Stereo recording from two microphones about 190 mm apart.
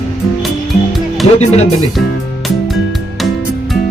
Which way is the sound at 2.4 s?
Centre (ahead or behind).